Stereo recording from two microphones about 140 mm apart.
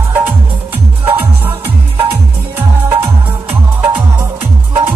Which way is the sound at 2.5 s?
15° right (ahead or behind).